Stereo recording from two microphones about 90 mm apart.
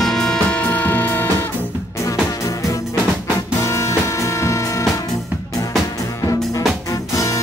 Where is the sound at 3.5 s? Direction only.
30° left (ahead or behind).